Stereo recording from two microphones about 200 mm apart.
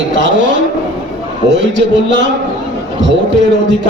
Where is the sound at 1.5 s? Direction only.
65° right (ahead or behind).